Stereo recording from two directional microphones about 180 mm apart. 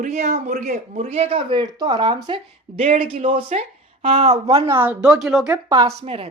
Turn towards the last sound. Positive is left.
turn(degrees=-30)  # may be behind; listen again after turning